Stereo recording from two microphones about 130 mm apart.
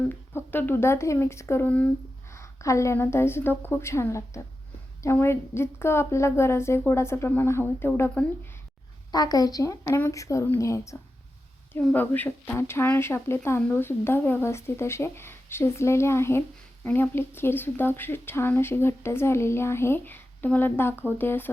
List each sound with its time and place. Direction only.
0.1 s speech: 15° left (ahead or behind)
9.1 s speech: 30° left (ahead or behind)
11.7 s speech: 10° left (ahead or behind)